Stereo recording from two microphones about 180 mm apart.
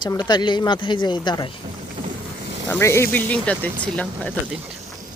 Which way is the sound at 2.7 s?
15° left (ahead or behind).